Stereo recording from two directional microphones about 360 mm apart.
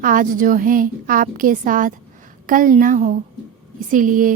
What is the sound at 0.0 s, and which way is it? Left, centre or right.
Speech, right.